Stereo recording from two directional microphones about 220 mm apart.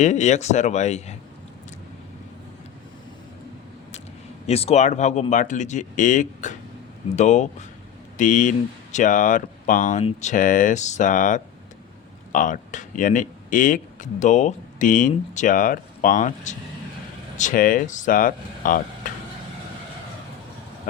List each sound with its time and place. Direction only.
0.0 s speech: 30° left (ahead or behind)
4.4 s speech: 30° left (ahead or behind)